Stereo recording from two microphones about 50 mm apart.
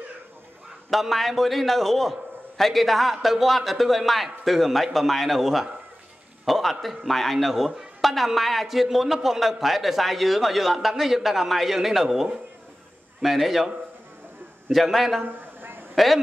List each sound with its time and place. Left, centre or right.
0.8 s a man's voice: centre
14.7 s a man's voice: centre
15.2 s a sound: right
15.9 s a man's voice: centre